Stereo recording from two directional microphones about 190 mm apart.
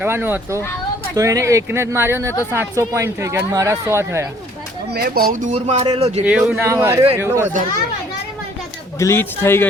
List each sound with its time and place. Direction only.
0.0 s speech: 10° right (ahead or behind)
4.9 s a man's voice: 55° right (ahead or behind); by 6.2 s 35° right (ahead or behind)
6.2 s a man's voice: 5° right (ahead or behind)
9.0 s speech: 15° left (ahead or behind)